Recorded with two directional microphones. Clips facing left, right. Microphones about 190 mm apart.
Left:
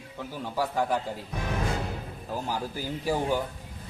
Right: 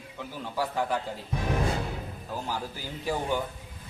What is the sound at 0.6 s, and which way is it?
Speech, 10° left (ahead or behind).